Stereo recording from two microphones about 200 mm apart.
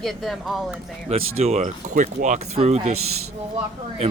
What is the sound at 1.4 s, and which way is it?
Speech, 30° right (ahead or behind).